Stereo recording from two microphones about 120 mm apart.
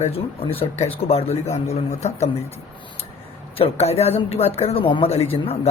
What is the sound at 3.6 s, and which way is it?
Speech, 60° left (ahead or behind).